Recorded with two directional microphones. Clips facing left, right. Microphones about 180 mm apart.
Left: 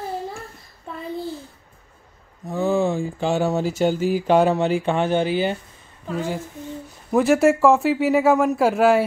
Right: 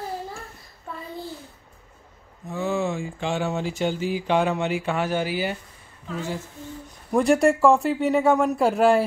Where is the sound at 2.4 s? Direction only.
35° left (ahead or behind).